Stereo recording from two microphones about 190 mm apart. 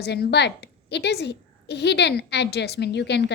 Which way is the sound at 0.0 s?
60° left (ahead or behind).